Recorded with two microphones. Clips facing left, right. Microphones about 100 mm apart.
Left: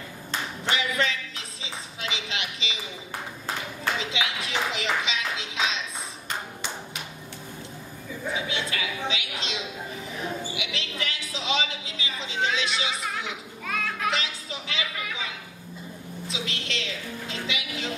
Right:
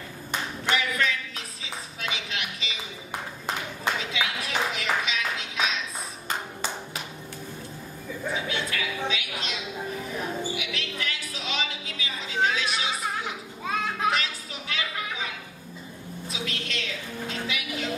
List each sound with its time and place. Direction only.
0.7 s a sound: 20° left (ahead or behind)
4.1 s music: 20° left (ahead or behind)
8.5 s music: 20° left (ahead or behind)
13.7 s music: 25° right (ahead or behind)
14.1 s music: 25° left (ahead or behind)
16.3 s a sound: 20° left (ahead or behind)
17.3 s music: 20° left (ahead or behind)